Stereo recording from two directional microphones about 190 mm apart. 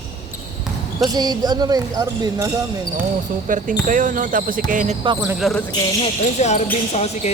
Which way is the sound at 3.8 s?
45° right (ahead or behind).